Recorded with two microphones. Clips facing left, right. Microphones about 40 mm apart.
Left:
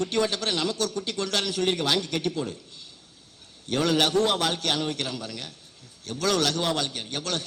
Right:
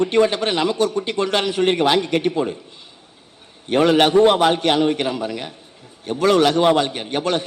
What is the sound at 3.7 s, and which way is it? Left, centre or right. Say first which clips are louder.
A man's voice: right 9 dB; right.